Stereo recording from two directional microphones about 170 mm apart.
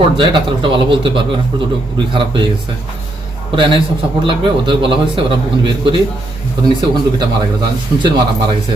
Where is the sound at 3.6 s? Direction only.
30° right (ahead or behind).